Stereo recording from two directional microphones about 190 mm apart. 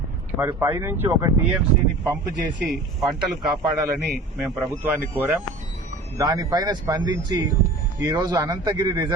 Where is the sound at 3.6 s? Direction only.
20° right (ahead or behind).